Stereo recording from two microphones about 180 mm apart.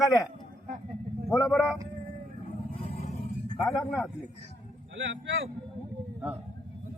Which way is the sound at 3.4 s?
25° left (ahead or behind).